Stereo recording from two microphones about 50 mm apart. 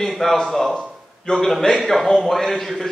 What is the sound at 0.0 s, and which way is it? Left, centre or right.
Speech, centre.